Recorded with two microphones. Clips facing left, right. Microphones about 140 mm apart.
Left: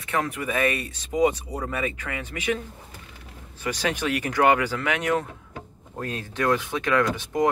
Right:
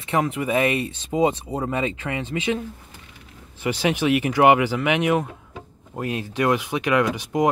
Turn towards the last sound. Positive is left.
turn(degrees=-15)  # may be behind; listen again after turning